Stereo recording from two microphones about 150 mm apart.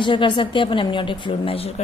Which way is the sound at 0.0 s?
35° left (ahead or behind).